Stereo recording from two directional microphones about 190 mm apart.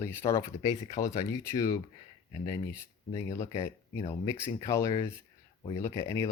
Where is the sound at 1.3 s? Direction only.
20° left (ahead or behind).